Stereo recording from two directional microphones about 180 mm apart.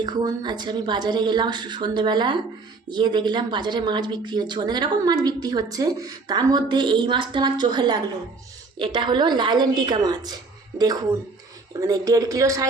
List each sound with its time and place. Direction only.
0.0 s speech: 25° right (ahead or behind)
11.8 s speech: 20° right (ahead or behind)